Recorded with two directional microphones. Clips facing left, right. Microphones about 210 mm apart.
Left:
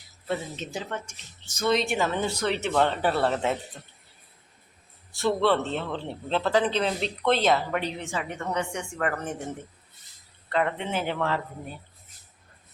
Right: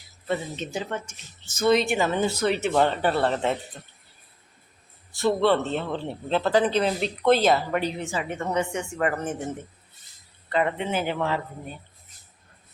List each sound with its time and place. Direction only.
0.3 s speech: centre (ahead or behind)
3.0 s speech: 5° left (ahead or behind)
5.1 s speech: centre (ahead or behind)
10.5 s speech: 5° right (ahead or behind)